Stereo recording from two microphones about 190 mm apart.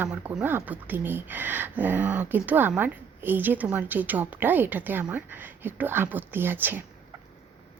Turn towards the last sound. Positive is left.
turn(degrees=-10)  # may be behind; listen again after turning